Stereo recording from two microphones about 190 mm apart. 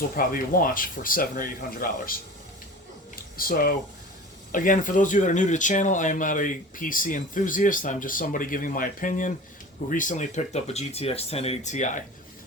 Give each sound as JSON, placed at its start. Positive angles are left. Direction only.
{"t": 0.2, "sound": "speech", "side_deg": 50}
{"t": 3.3, "sound": "speech", "side_deg": 50}